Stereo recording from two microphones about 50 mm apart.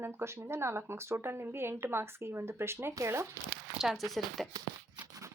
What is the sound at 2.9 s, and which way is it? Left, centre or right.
Speech, right.